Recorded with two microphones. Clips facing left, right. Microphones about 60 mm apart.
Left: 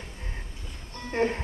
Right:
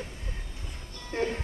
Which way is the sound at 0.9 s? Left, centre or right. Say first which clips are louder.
Left 4 dB; left.